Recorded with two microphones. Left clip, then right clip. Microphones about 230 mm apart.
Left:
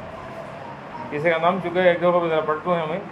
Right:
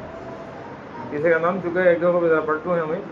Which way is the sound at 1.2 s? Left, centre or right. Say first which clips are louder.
Even; left.